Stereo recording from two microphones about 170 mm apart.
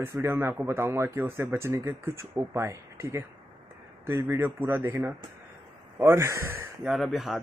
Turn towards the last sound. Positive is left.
turn(degrees=0)  # may be behind; listen again after turning